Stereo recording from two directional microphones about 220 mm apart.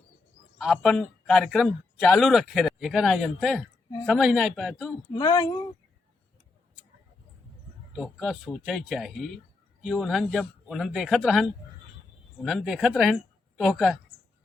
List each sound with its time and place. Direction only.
0.6 s a man's voice: centre (ahead or behind)
5.1 s speech: 15° left (ahead or behind)
7.9 s a man's voice: 5° right (ahead or behind)